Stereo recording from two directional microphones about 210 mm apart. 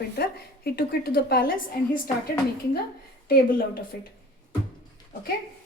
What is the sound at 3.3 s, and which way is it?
Speech, 40° left (ahead or behind).